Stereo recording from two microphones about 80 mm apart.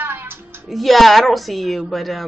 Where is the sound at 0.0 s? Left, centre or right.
Right.